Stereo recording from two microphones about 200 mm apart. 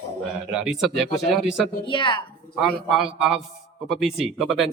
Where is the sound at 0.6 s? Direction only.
Centre (ahead or behind).